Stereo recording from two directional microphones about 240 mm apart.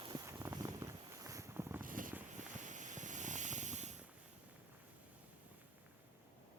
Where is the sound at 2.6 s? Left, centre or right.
Right.